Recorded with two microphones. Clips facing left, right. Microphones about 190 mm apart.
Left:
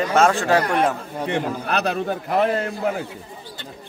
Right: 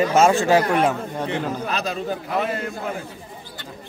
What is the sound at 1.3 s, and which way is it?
A man's voice, 65° left (ahead or behind).